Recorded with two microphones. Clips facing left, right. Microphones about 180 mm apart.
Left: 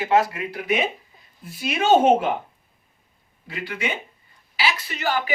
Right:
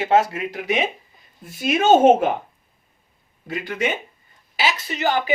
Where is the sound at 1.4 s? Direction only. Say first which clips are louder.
Right 4 dB; 45° right (ahead or behind).